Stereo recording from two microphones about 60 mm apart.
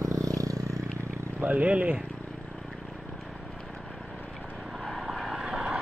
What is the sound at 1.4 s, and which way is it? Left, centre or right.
Speech, right.